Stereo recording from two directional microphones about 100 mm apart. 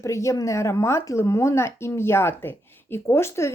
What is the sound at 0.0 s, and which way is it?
A woman's voice, 30° left (ahead or behind).